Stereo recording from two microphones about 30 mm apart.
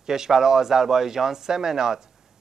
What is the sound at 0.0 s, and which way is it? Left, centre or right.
A man's voice, centre.